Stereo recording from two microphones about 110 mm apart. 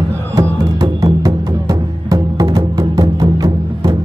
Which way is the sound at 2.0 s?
35° right (ahead or behind).